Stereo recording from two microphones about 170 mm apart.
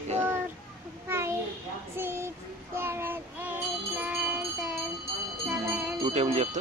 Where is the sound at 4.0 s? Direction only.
10° right (ahead or behind).